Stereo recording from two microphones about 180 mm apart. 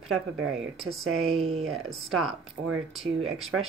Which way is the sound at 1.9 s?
Centre (ahead or behind).